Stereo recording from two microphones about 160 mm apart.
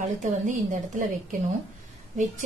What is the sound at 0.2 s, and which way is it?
Speech, 55° right (ahead or behind).